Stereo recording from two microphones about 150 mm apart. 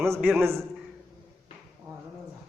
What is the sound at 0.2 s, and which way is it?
Speech, 5° right (ahead or behind).